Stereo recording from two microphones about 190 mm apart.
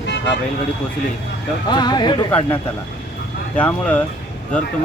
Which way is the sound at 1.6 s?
20° left (ahead or behind).